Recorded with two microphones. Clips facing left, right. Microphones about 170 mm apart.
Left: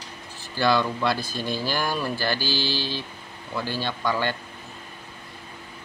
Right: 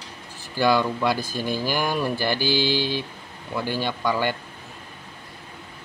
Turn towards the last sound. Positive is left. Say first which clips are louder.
# right 2 dB
turn(degrees=-10)  # may be behind; listen again after turning